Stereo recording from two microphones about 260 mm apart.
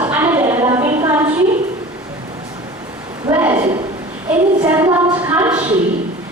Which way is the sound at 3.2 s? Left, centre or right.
Centre.